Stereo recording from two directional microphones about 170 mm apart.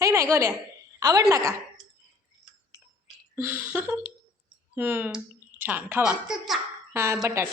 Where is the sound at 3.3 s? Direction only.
10° right (ahead or behind).